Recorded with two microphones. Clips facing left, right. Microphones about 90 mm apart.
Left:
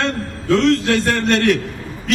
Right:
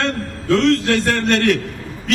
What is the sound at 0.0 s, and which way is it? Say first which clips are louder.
A man's voice: even; 15° left (ahead or behind).